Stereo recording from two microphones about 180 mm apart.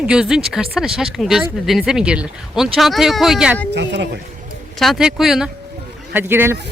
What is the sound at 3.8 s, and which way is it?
Speech, 75° right (ahead or behind).